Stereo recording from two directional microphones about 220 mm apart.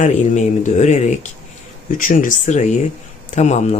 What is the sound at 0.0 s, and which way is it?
Speech, 35° left (ahead or behind).